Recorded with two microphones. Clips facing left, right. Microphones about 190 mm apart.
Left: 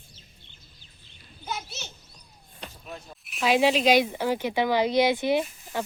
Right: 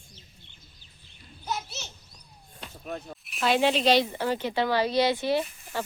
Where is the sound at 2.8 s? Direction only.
50° right (ahead or behind).